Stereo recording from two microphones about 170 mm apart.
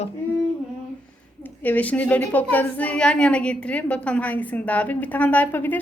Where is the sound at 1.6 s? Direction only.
10° left (ahead or behind).